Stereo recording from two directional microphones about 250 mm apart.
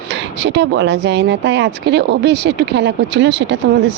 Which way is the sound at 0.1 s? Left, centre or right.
Right.